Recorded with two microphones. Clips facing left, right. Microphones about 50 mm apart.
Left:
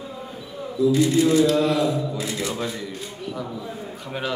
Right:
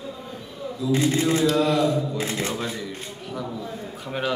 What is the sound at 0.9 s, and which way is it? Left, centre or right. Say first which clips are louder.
Speech: left 2 dB; right.